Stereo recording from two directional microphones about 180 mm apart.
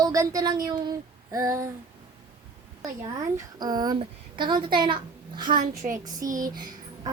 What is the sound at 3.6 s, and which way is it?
Speech, 20° right (ahead or behind).